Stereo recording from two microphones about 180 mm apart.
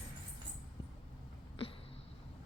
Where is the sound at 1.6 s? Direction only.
30° left (ahead or behind).